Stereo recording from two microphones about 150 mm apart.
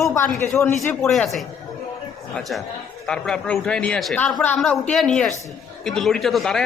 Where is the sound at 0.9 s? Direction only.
5° left (ahead or behind).